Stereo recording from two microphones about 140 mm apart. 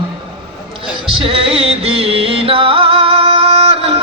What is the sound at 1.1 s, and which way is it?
Music, 40° right (ahead or behind).